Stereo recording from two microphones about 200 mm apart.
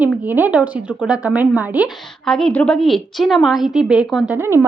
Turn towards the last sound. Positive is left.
turn(degrees=-10)  # may be behind; listen again after turning